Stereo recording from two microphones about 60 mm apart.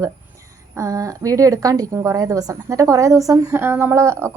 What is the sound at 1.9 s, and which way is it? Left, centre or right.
Speech, right.